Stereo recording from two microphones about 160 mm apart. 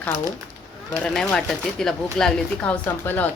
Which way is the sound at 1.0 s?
5° left (ahead or behind).